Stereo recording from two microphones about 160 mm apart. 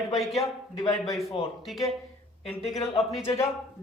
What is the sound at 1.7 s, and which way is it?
Speech, centre (ahead or behind).